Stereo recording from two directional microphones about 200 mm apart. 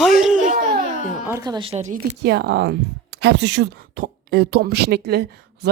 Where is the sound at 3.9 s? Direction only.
50° right (ahead or behind).